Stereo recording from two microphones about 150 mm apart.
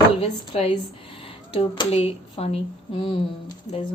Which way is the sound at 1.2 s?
30° left (ahead or behind).